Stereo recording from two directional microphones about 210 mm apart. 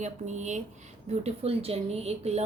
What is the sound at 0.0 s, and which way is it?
A woman's voice, 35° right (ahead or behind).